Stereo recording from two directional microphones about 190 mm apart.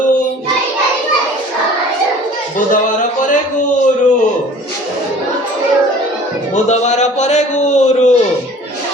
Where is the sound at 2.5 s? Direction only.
40° left (ahead or behind).